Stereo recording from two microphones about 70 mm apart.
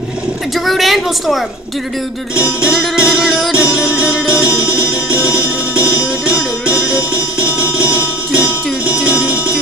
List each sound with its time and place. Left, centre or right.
0.7 s a woman's voice: centre
2.3 s music: centre